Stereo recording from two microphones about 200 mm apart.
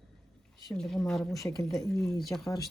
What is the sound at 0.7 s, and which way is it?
Speech, centre (ahead or behind).